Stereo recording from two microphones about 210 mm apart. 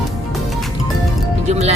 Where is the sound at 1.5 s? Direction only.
30° right (ahead or behind).